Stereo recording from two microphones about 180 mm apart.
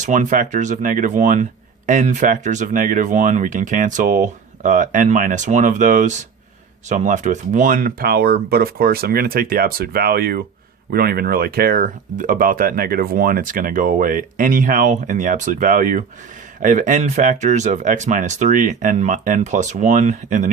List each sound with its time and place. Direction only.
0.0 s speech: 45° right (ahead or behind)